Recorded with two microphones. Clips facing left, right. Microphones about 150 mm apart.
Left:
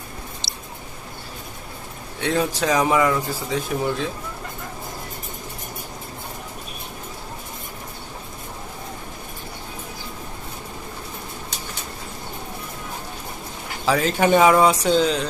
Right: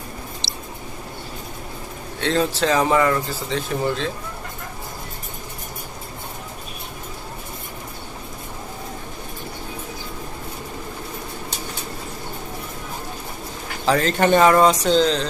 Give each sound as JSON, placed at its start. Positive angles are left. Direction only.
{"t": 0.4, "sound": "a sound", "side_deg": 45}
{"t": 2.2, "sound": "speech", "side_deg": 10}
{"t": 13.8, "sound": "speech", "side_deg": 5}